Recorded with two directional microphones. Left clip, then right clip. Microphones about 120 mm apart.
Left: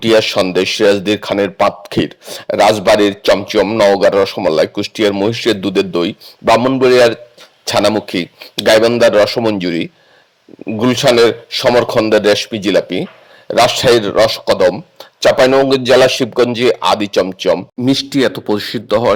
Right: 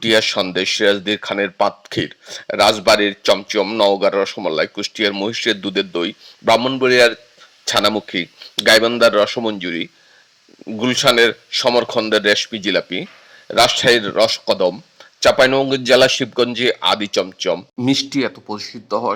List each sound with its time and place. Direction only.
0.0 s speech: 45° left (ahead or behind)
6.6 s a man's voice: 25° left (ahead or behind)
6.8 s speech: 40° left (ahead or behind)